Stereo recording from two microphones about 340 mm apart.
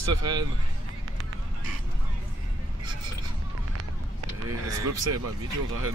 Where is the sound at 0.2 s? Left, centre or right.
Centre.